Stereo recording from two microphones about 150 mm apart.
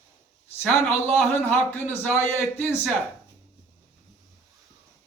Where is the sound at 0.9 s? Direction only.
10° left (ahead or behind).